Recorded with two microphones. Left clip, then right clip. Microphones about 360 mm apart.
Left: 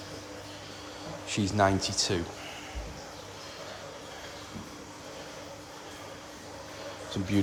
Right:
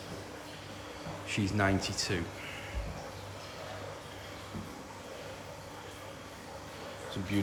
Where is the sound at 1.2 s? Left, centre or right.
Centre.